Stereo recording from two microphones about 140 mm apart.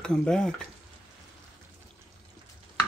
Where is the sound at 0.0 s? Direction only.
5° left (ahead or behind).